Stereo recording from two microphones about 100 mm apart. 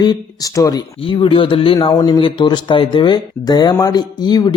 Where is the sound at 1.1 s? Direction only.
60° left (ahead or behind).